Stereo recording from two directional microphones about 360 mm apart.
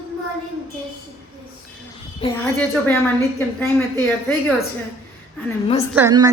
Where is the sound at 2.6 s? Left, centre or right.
Centre.